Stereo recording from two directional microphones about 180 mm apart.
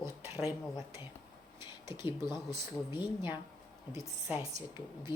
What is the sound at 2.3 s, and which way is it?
Speech, 25° left (ahead or behind).